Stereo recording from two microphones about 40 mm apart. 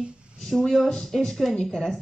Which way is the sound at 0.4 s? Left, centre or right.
Centre.